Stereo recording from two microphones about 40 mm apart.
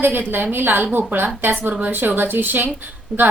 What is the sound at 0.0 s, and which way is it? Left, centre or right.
A woman's voice, right.